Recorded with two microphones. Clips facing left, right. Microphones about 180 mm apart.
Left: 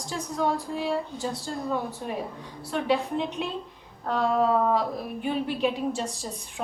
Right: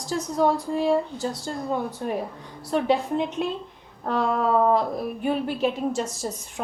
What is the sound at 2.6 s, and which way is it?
Speech, 40° right (ahead or behind).